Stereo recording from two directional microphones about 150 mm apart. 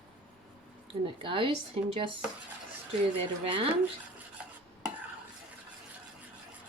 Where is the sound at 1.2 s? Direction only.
35° right (ahead or behind).